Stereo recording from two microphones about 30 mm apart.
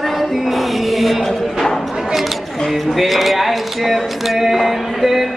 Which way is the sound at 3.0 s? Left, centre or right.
Centre.